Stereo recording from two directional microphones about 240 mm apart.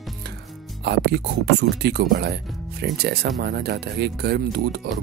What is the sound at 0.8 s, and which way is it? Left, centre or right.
Speech, right.